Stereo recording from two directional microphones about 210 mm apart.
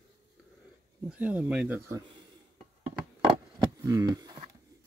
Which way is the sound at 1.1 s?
5° right (ahead or behind).